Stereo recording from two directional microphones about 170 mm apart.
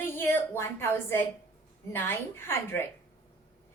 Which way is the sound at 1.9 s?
10° left (ahead or behind).